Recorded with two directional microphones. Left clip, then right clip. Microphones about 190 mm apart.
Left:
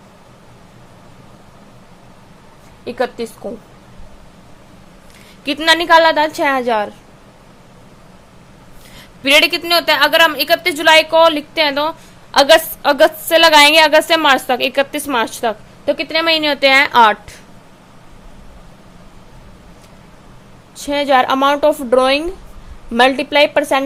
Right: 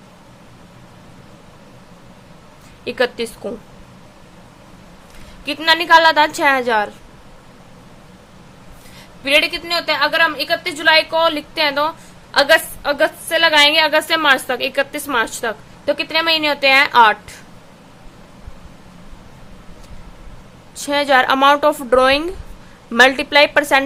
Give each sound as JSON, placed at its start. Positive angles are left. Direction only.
{"t": 2.8, "sound": "a woman's voice", "side_deg": 0}
{"t": 5.5, "sound": "speech", "side_deg": 25}
{"t": 9.0, "sound": "a woman's voice", "side_deg": 40}
{"t": 20.7, "sound": "speech", "side_deg": 5}